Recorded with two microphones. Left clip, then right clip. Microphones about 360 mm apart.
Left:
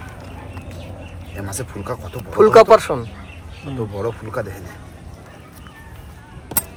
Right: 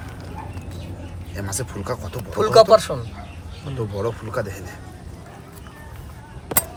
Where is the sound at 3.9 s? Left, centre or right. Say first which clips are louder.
Even; centre.